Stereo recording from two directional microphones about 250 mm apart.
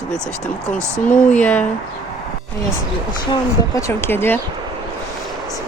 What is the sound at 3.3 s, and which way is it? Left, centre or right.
A woman's voice, centre.